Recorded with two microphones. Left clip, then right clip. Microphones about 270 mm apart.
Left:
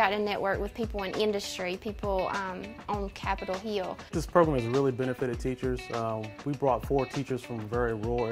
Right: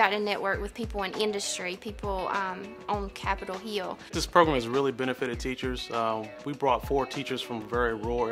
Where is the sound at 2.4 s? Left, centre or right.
Left.